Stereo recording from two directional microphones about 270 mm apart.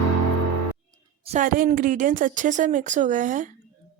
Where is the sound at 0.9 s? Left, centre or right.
Right.